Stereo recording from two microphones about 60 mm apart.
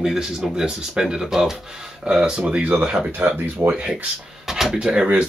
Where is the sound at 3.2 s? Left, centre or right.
Right.